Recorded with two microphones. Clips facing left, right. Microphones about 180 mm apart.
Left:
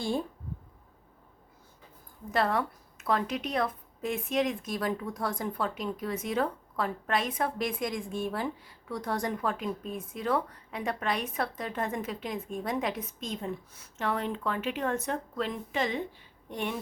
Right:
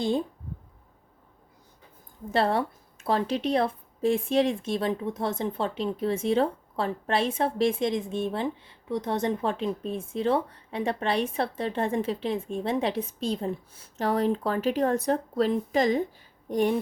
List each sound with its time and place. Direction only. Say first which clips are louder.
2.3 s a woman's voice: right 3 dB; 30° right (ahead or behind)